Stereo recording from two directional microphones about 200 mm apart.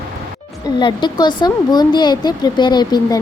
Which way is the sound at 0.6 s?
20° left (ahead or behind).